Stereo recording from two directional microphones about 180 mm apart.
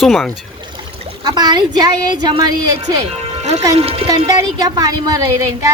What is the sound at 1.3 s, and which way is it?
A woman's voice, 20° right (ahead or behind).